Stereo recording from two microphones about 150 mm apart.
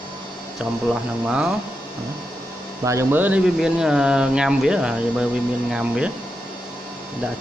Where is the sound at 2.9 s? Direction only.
15° right (ahead or behind).